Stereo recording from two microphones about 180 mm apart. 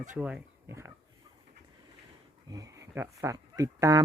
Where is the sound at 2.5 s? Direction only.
20° right (ahead or behind).